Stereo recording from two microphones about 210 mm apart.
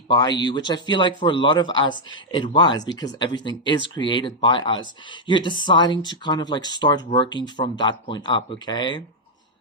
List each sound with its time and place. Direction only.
0.1 s speech: 20° left (ahead or behind)